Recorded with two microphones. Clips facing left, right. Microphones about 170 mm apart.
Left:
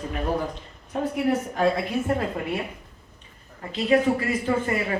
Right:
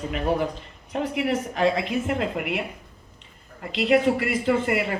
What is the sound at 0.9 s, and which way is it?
A woman's voice, 90° right.